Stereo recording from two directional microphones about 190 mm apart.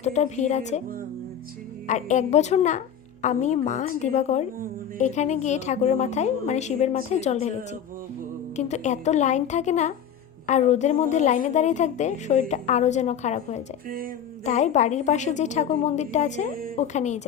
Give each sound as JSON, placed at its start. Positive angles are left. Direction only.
{"t": 0.0, "sound": "a woman's voice", "side_deg": 35}
{"t": 1.9, "sound": "a woman's voice", "side_deg": 40}